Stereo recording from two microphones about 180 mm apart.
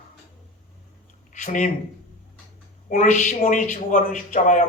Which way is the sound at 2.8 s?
45° left (ahead or behind).